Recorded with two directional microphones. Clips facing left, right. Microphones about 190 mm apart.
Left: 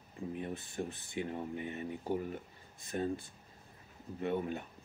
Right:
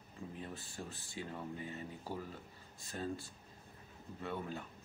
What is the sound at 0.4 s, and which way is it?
Speech, 20° left (ahead or behind).